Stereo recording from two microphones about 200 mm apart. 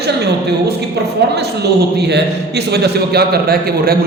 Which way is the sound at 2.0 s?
55° right (ahead or behind).